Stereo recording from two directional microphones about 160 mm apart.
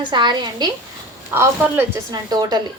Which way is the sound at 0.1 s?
30° right (ahead or behind).